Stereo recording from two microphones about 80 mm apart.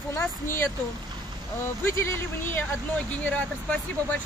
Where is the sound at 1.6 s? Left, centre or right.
Left.